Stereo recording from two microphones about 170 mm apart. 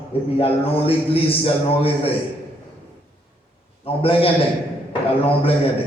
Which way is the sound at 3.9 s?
35° left (ahead or behind).